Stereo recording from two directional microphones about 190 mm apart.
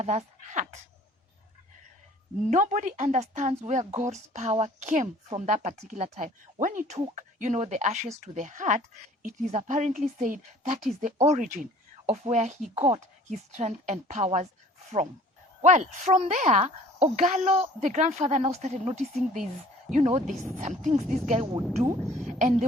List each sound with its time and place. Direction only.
0.0 s speech: 35° right (ahead or behind)
2.5 s a woman's voice: 40° right (ahead or behind)
15.6 s a woman's voice: 40° right (ahead or behind)
22.2 s a sound: 40° right (ahead or behind)